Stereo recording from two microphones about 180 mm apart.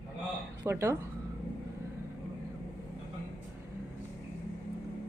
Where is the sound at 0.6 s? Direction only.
15° right (ahead or behind).